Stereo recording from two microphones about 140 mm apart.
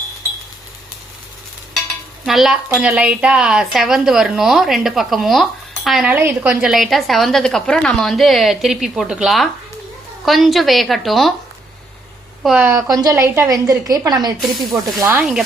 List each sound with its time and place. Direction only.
2.2 s speech: centre (ahead or behind)
6.1 s speech: 15° right (ahead or behind)
12.5 s a woman's voice: 15° right (ahead or behind)
12.9 s a woman's voice: 25° right (ahead or behind)
15.2 s speech: 5° right (ahead or behind)